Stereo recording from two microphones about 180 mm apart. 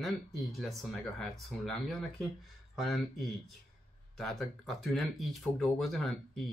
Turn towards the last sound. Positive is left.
turn(degrees=0)  # may be behind; listen again after turning